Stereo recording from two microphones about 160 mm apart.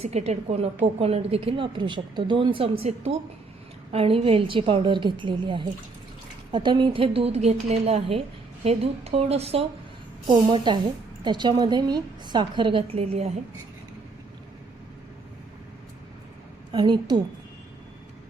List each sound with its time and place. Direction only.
0.0 s a woman's voice: 45° right (ahead or behind)
10.2 s a woman's voice: 30° right (ahead or behind)
16.7 s a woman's voice: 25° right (ahead or behind)